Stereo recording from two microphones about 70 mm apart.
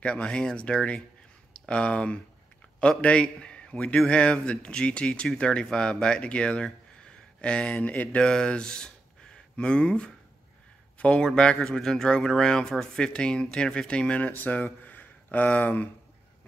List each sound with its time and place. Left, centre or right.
0.0 s a man's voice: centre